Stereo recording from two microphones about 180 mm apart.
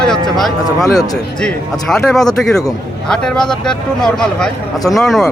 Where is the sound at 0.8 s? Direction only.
20° left (ahead or behind).